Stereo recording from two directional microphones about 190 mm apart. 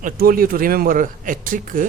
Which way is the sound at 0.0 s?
50° right (ahead or behind).